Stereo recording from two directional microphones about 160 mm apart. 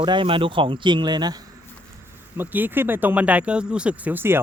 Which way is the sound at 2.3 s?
10° right (ahead or behind).